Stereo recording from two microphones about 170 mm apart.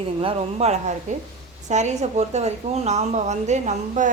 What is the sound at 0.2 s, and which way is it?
A woman's voice, 35° right (ahead or behind).